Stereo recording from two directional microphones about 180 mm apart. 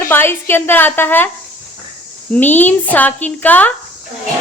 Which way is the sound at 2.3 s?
10° left (ahead or behind).